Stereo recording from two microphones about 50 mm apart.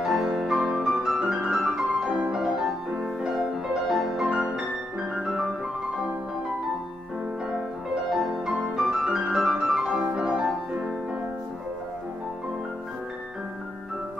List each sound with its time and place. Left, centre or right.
0.0 s music: centre
2.0 s music: right
2.3 s music: centre
8.1 s music: centre